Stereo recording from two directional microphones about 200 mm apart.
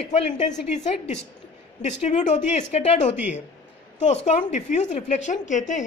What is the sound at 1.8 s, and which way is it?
A woman's voice, 35° left (ahead or behind).